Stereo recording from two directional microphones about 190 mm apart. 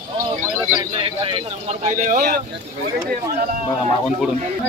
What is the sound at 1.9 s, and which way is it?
Speech, 45° right (ahead or behind).